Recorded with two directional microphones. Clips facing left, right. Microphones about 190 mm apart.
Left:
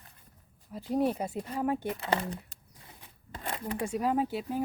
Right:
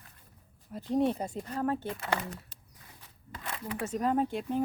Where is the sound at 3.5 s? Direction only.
30° left (ahead or behind).